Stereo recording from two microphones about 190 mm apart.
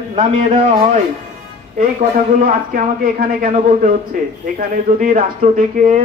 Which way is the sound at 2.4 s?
50° right (ahead or behind).